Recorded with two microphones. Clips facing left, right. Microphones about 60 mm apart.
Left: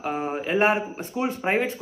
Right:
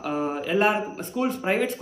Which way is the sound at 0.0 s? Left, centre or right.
Left.